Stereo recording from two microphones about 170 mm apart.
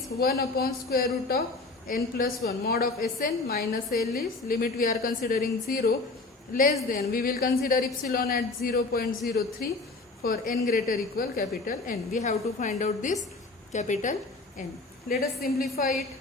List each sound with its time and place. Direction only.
0.2 s a woman's voice: 65° left (ahead or behind)
6.9 s a woman's voice: 55° left (ahead or behind)
15.1 s a woman's voice: 60° left (ahead or behind)